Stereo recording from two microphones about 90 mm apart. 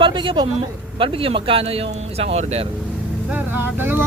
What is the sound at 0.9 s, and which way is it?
Speech, 80° right.